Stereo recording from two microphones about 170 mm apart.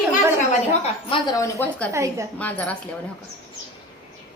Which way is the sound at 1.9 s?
15° right (ahead or behind).